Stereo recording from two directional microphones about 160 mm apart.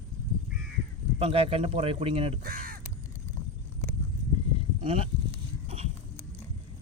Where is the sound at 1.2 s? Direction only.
40° right (ahead or behind).